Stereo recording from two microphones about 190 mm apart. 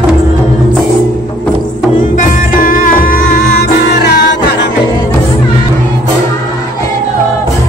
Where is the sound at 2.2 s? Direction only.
45° left (ahead or behind).